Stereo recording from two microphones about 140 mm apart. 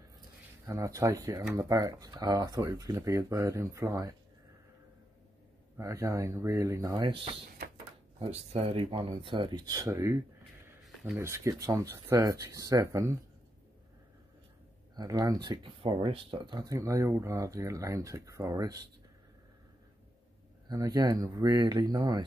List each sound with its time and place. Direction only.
0.7 s speech: 25° right (ahead or behind)
5.8 s speech: 20° right (ahead or behind)
10.8 s a sound: centre (ahead or behind)
11.1 s speech: 20° right (ahead or behind)
15.0 s speech: 25° right (ahead or behind)
20.6 s speech: 25° right (ahead or behind)